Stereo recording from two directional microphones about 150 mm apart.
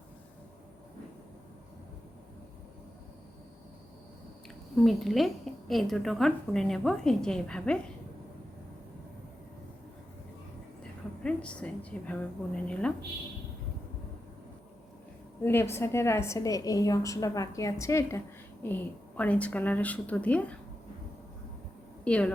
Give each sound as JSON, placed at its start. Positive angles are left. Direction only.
{"t": 4.8, "sound": "a woman's voice", "side_deg": 0}
{"t": 11.2, "sound": "a woman's voice", "side_deg": 5}
{"t": 15.4, "sound": "a woman's voice", "side_deg": 15}
{"t": 22.0, "sound": "a woman's voice", "side_deg": 10}